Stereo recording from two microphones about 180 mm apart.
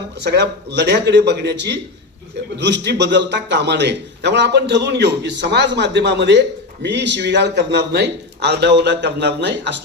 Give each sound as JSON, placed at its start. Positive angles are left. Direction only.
{"t": 0.2, "sound": "a man's voice", "side_deg": -70}